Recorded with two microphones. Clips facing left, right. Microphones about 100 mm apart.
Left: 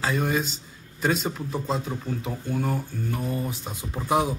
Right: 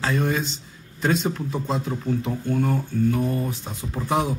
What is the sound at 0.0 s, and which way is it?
Speech, 5° left (ahead or behind).